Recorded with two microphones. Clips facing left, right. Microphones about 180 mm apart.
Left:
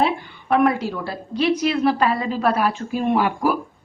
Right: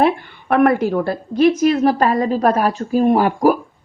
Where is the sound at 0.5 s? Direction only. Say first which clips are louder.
Right 4 dB; 55° right (ahead or behind).